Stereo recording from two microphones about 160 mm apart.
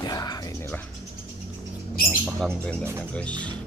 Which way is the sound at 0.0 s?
25° left (ahead or behind).